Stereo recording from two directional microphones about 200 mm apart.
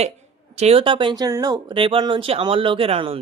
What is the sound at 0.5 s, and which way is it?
A woman's voice, 30° right (ahead or behind).